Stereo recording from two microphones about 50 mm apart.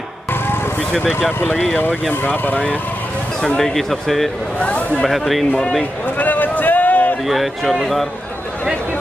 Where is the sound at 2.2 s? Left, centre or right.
Left.